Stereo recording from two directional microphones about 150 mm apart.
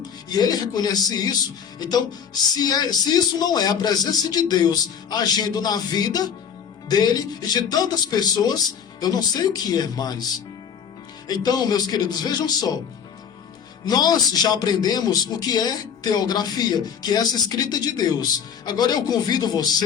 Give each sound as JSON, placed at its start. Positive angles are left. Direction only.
{"t": 0.3, "sound": "a man's voice", "side_deg": 25}
{"t": 2.6, "sound": "a man's voice", "side_deg": 25}
{"t": 11.3, "sound": "a man's voice", "side_deg": 25}
{"t": 13.8, "sound": "a man's voice", "side_deg": 25}